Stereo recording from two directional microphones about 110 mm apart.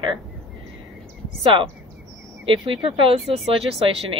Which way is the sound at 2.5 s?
55° right (ahead or behind).